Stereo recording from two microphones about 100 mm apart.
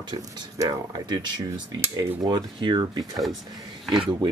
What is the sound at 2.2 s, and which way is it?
Speech, 45° right (ahead or behind).